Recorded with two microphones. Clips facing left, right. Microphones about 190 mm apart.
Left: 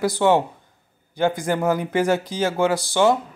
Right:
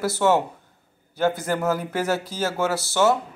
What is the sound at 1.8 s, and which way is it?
Speech, 5° right (ahead or behind).